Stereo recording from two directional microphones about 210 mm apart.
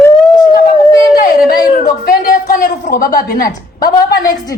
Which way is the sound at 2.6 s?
40° left (ahead or behind).